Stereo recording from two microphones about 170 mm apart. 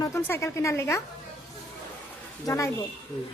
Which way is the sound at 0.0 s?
15° left (ahead or behind).